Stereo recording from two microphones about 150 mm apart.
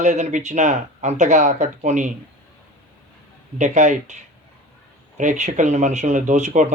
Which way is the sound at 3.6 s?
50° right (ahead or behind).